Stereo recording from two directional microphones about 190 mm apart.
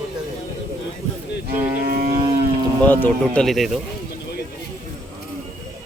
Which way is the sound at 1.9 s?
50° right (ahead or behind).